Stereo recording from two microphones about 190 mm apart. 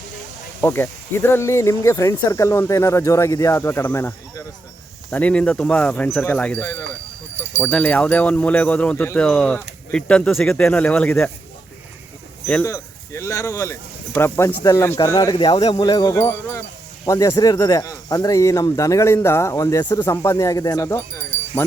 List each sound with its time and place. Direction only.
0.6 s speech: 10° left (ahead or behind)
12.5 s speech: 10° left (ahead or behind)
15.4 s speech: 25° left (ahead or behind)